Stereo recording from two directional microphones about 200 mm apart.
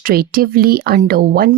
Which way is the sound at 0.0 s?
50° right (ahead or behind).